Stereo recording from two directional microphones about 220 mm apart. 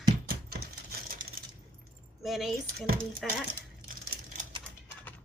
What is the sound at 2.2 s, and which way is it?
A woman's voice, centre (ahead or behind).